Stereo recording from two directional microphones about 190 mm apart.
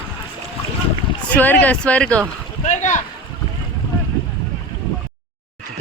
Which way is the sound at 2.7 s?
40° left (ahead or behind).